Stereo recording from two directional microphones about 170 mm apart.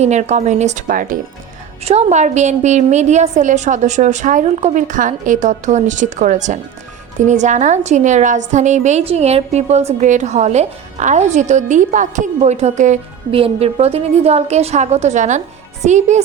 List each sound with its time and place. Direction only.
0.0 s a woman's voice: 40° right (ahead or behind)
1.8 s a woman's voice: 40° right (ahead or behind)